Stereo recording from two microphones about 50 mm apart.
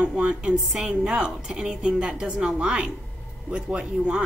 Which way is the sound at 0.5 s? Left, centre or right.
Centre.